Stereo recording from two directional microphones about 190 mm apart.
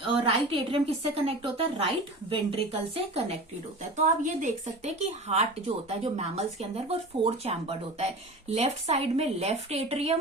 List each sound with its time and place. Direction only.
0.0 s a woman's voice: 30° right (ahead or behind)
3.9 s speech: 40° right (ahead or behind)